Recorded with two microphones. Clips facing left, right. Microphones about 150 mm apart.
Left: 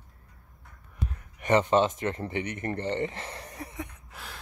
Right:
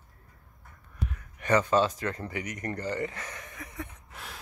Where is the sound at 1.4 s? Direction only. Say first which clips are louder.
Left 2 dB; 25° left (ahead or behind).